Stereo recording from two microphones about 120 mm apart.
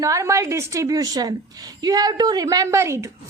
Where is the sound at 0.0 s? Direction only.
25° right (ahead or behind).